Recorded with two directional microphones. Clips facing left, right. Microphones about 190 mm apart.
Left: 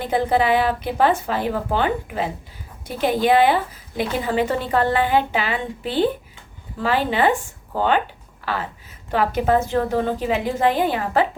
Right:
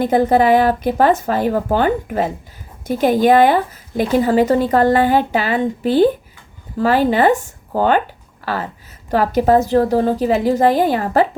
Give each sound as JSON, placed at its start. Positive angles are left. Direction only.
{"t": 0.0, "sound": "speech", "side_deg": -45}